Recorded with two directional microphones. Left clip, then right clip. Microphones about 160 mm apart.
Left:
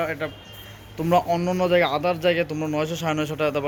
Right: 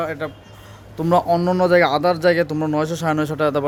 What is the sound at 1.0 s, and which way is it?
Speech, 30° right (ahead or behind).